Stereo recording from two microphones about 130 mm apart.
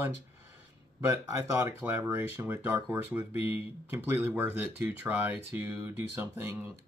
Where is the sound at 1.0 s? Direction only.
25° right (ahead or behind).